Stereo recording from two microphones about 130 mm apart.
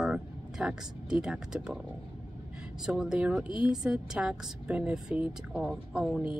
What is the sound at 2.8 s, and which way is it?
A woman's voice, 5° right (ahead or behind).